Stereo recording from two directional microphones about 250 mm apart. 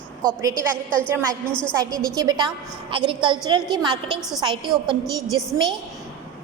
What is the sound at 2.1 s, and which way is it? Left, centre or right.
A woman's voice, centre.